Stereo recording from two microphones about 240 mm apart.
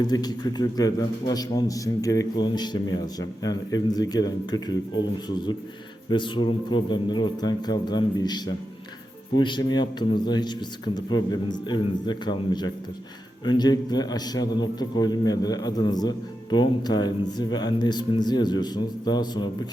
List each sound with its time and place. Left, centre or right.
0.1 s a man's voice: centre